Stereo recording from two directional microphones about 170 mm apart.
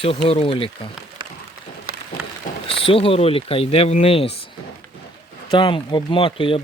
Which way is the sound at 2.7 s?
35° left (ahead or behind).